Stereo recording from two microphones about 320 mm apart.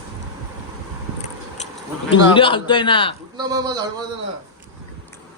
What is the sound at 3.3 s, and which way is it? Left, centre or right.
Speech, centre.